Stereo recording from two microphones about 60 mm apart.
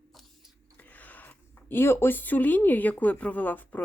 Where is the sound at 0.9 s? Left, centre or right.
Left.